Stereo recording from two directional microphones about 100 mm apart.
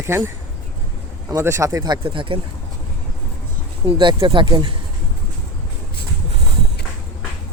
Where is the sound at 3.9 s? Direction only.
90° right.